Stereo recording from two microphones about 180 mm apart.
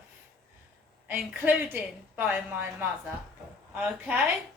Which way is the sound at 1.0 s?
10° right (ahead or behind).